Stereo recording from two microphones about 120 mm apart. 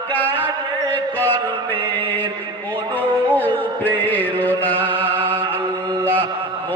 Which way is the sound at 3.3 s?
15° left (ahead or behind).